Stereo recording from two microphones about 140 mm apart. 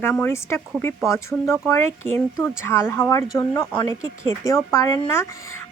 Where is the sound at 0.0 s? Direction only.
15° left (ahead or behind).